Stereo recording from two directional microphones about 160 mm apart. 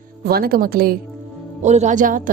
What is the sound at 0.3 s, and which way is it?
Speech, 70° right (ahead or behind).